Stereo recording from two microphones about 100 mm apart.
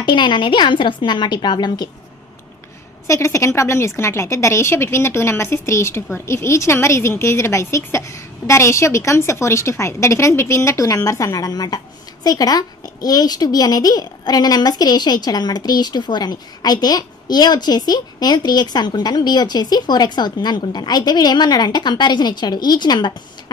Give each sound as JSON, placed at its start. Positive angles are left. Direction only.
{"t": 0.0, "sound": "a woman's voice", "side_deg": 50}
{"t": 3.1, "sound": "a woman's voice", "side_deg": 30}